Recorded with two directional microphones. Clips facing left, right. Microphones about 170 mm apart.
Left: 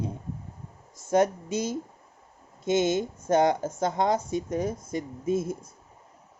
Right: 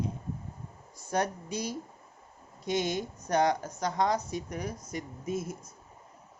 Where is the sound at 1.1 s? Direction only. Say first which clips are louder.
Left 8 dB; 20° left (ahead or behind).